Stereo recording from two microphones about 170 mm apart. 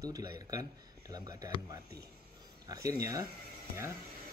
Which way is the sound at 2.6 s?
20° right (ahead or behind).